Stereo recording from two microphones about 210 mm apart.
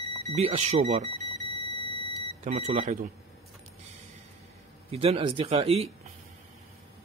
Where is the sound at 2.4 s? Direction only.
35° right (ahead or behind).